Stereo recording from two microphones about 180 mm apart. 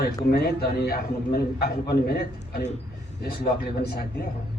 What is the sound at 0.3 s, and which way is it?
A man's voice, 60° left (ahead or behind).